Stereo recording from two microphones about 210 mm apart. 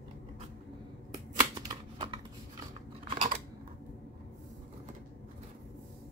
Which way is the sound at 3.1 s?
35° right (ahead or behind).